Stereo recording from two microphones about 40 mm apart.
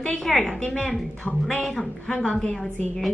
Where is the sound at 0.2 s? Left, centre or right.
Centre.